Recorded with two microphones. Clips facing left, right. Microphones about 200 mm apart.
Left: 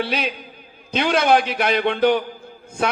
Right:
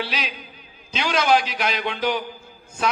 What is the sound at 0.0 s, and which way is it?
A man's voice, 55° left (ahead or behind).